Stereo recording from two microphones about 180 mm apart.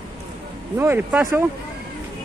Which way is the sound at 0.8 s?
10° right (ahead or behind).